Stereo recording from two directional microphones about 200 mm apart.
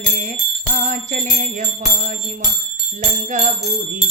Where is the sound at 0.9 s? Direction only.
40° right (ahead or behind).